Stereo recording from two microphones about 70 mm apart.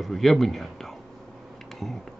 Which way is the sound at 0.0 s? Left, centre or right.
Centre.